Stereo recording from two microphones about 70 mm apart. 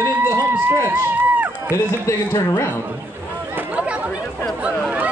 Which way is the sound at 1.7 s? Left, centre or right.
Left.